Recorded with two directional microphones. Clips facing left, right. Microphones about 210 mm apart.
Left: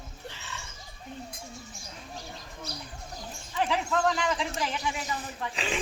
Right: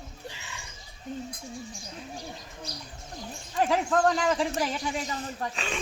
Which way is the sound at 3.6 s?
45° right (ahead or behind).